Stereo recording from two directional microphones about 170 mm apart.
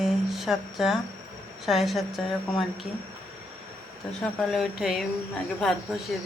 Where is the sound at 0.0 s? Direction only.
Centre (ahead or behind).